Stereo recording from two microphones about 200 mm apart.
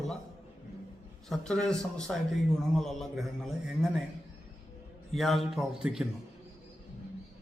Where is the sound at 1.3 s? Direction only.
5° left (ahead or behind).